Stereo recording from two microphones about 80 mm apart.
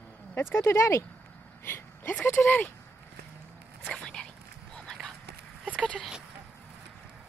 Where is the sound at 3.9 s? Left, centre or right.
Centre.